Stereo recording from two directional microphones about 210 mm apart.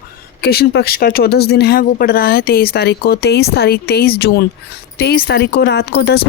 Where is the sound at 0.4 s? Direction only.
50° left (ahead or behind).